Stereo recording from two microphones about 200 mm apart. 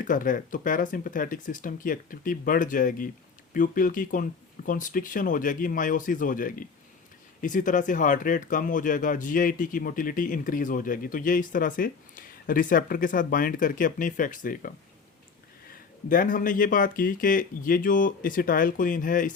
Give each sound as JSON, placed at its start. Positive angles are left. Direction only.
{"t": 0.0, "sound": "speech", "side_deg": 40}
{"t": 16.0, "sound": "speech", "side_deg": 45}